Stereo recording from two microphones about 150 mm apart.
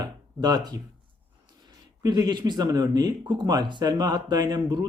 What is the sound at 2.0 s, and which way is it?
Speech, 25° right (ahead or behind).